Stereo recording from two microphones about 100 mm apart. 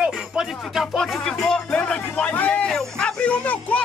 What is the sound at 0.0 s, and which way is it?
Music, 5° right (ahead or behind).